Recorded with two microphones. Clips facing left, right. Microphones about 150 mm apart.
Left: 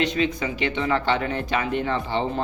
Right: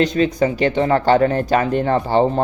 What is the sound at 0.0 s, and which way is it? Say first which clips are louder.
Speech: right 7 dB; 40° right (ahead or behind).